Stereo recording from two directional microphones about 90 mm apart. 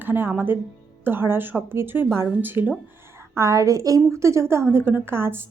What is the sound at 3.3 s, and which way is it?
A woman's voice, 35° right (ahead or behind).